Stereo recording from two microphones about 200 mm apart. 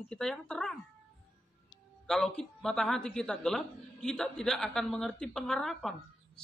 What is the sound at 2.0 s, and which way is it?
A woman's voice, 5° left (ahead or behind).